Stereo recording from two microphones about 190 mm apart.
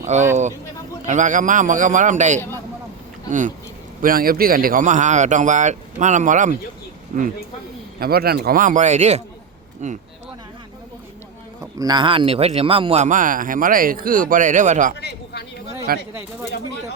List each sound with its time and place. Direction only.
0.0 s speech: 40° right (ahead or behind)
7.9 s a man's voice: 55° right (ahead or behind)
11.6 s speech: 20° right (ahead or behind); by 14.9 s 40° right (ahead or behind)
15.0 s a sound: 60° left (ahead or behind)
15.9 s a man's voice: 50° right (ahead or behind)